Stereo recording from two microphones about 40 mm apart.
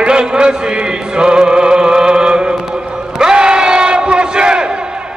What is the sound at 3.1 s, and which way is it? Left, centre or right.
Battle cry, right.